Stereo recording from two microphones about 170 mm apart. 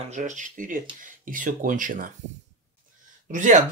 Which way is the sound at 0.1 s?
45° right (ahead or behind).